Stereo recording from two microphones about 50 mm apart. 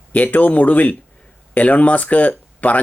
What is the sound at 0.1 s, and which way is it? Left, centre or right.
Speech, left.